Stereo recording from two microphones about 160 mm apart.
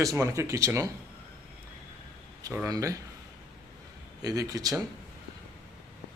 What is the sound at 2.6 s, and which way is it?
Speech, 20° right (ahead or behind).